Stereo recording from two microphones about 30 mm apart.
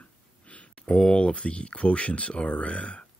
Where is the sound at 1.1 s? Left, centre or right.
Left.